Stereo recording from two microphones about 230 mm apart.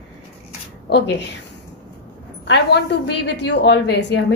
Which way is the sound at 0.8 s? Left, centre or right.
Left.